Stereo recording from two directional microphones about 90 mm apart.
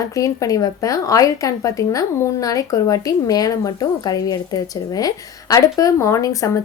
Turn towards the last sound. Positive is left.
turn(degrees=35)  # may be behind; listen again after turning